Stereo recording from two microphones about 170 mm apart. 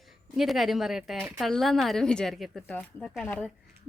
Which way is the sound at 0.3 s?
Centre (ahead or behind).